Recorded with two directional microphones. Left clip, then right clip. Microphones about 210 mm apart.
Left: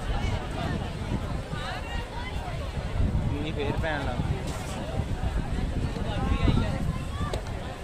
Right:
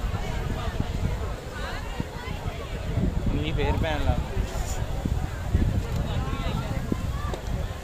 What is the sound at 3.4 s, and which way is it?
Speech, 30° right (ahead or behind).